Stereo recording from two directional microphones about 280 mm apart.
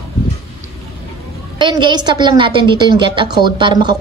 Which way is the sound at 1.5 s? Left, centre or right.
Centre.